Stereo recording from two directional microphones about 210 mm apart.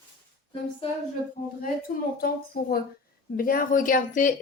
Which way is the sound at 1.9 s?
45° left (ahead or behind).